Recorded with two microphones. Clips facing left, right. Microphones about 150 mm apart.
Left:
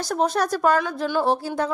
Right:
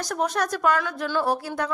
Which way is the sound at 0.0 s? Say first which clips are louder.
Left 3 dB; 30° left (ahead or behind).